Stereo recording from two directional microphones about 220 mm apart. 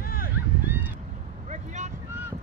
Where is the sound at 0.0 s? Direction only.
40° left (ahead or behind).